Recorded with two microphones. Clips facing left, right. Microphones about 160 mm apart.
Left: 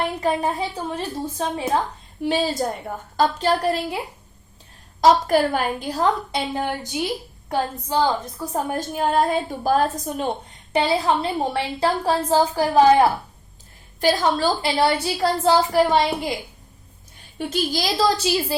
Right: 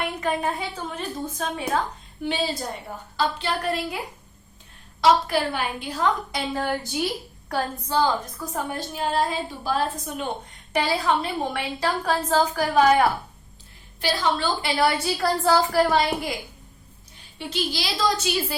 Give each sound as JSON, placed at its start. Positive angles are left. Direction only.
{"t": 0.0, "sound": "a woman's voice", "side_deg": 35}
{"t": 2.2, "sound": "a woman's voice", "side_deg": 45}
{"t": 4.9, "sound": "a woman's voice", "side_deg": 45}
{"t": 6.5, "sound": "a woman's voice", "side_deg": 20}
{"t": 8.5, "sound": "a woman's voice", "side_deg": 45}
{"t": 10.7, "sound": "a woman's voice", "side_deg": 25}
{"t": 14.0, "sound": "a woman's voice", "side_deg": 45}
{"t": 17.3, "sound": "a woman's voice", "side_deg": 45}